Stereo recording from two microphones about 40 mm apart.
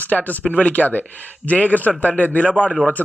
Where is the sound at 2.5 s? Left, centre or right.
Right.